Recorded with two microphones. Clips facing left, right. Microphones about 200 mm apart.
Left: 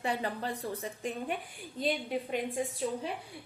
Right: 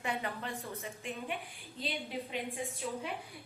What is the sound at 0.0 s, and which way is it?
A woman's voice, 35° left (ahead or behind).